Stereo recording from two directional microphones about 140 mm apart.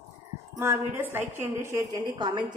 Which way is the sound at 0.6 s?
15° right (ahead or behind).